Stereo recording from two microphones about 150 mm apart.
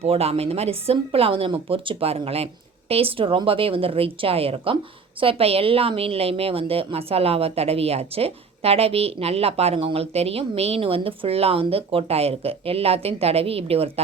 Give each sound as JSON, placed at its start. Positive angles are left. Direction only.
{"t": 0.0, "sound": "a woman's voice", "side_deg": -45}